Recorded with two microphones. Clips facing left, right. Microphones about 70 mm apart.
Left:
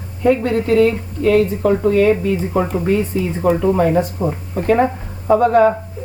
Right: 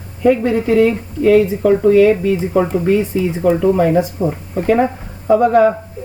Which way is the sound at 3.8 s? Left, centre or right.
Centre.